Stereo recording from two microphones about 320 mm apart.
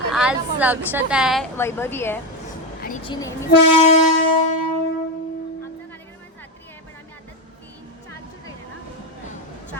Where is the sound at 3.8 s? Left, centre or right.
Left.